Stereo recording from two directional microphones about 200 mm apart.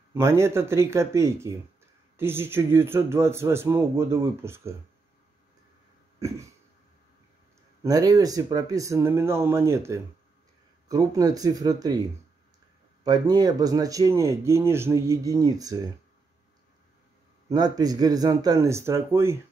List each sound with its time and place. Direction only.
0.1 s speech: 15° right (ahead or behind)
6.1 s a sound: 15° right (ahead or behind)
7.8 s speech: 20° right (ahead or behind)
13.0 s speech: 20° right (ahead or behind)
17.5 s speech: 20° right (ahead or behind)